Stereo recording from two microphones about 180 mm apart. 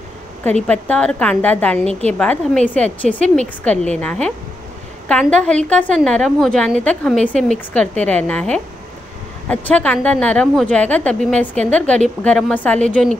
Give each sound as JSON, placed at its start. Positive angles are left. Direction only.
{"t": 0.7, "sound": "a woman's voice", "side_deg": 5}
{"t": 1.9, "sound": "a woman's voice", "side_deg": -35}
{"t": 2.1, "sound": "a woman's voice", "side_deg": 5}